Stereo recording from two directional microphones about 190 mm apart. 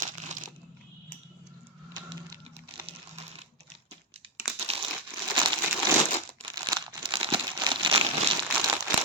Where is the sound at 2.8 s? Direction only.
30° right (ahead or behind).